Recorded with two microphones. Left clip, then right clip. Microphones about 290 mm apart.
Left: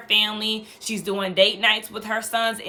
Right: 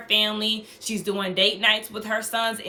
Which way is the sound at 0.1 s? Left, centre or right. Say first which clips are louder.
Left 1 dB; centre.